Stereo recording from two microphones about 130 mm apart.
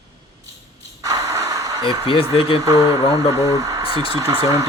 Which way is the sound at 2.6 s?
25° right (ahead or behind).